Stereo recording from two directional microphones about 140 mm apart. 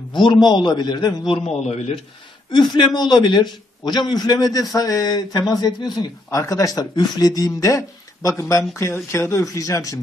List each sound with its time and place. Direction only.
0.2 s a man's voice: 35° left (ahead or behind)
2.5 s a man's voice: 30° left (ahead or behind)